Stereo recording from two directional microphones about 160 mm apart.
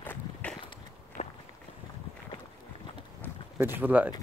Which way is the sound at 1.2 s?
45° left (ahead or behind).